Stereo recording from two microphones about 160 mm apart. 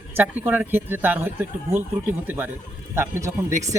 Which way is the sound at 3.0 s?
15° right (ahead or behind).